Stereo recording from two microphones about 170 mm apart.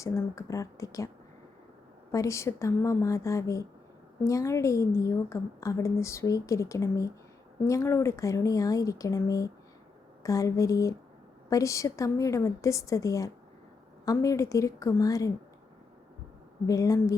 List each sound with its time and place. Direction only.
0.0 s speech: 20° left (ahead or behind)
2.1 s a woman's voice: 15° left (ahead or behind)
16.6 s speech: 20° left (ahead or behind)